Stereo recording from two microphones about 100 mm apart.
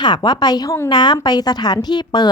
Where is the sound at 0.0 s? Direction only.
45° left (ahead or behind).